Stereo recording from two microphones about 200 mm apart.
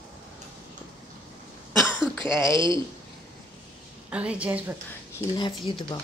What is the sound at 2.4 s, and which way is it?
Speech, 25° right (ahead or behind).